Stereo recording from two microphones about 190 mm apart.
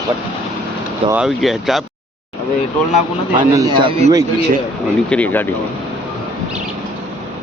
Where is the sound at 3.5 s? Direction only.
20° right (ahead or behind).